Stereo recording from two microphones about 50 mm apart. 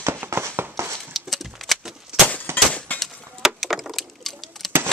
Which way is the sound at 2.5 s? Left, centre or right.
Right.